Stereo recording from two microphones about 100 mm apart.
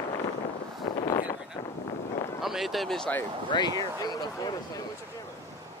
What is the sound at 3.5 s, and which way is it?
Speech, 45° left (ahead or behind).